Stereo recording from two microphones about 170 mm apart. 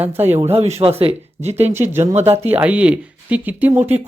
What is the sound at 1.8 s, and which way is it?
Speech, 15° right (ahead or behind).